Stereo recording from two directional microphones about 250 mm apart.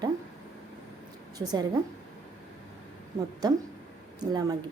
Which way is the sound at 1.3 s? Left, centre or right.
Centre.